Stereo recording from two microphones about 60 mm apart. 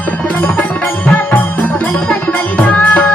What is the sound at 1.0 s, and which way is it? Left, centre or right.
Music, left.